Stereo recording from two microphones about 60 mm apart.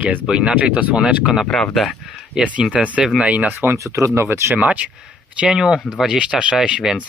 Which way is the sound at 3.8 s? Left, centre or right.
Right.